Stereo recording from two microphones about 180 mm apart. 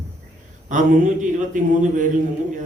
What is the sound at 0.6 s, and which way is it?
A man's voice, 45° right (ahead or behind).